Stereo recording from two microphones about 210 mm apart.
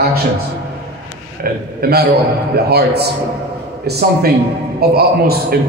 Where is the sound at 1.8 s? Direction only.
50° right (ahead or behind).